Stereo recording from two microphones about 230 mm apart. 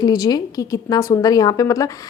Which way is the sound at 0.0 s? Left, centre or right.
Centre.